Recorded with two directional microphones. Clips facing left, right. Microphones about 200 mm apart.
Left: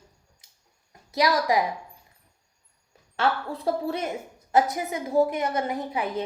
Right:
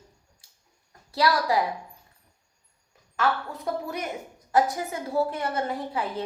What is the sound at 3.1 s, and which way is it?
A woman's voice, 30° left (ahead or behind).